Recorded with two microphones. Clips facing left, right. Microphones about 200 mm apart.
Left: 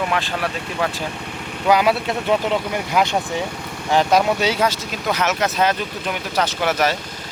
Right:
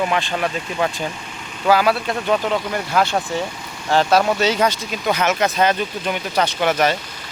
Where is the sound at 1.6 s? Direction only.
20° left (ahead or behind).